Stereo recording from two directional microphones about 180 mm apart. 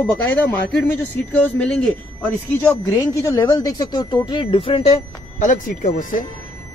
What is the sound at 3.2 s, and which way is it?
Speech, 15° left (ahead or behind).